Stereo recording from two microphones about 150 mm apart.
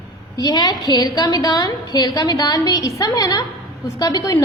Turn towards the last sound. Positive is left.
turn(degrees=25)  # may be behind; listen again after turning